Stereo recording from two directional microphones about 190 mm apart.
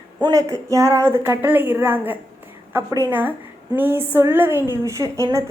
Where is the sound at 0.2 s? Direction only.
15° right (ahead or behind).